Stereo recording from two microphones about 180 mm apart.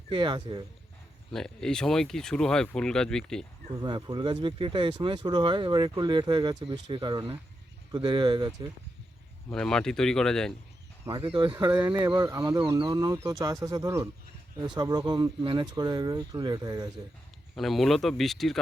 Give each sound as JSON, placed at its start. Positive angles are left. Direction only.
{"t": 0.1, "sound": "speech", "side_deg": -25}
{"t": 1.3, "sound": "speech", "side_deg": 5}
{"t": 3.8, "sound": "speech", "side_deg": -25}
{"t": 9.5, "sound": "speech", "side_deg": 5}
{"t": 11.1, "sound": "speech", "side_deg": -30}
{"t": 17.5, "sound": "speech", "side_deg": 0}